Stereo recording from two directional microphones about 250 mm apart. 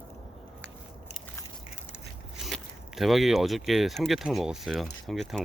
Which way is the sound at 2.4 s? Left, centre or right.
Centre.